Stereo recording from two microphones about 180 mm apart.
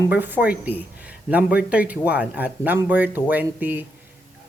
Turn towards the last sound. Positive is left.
turn(degrees=-10)  # may be behind; listen again after turning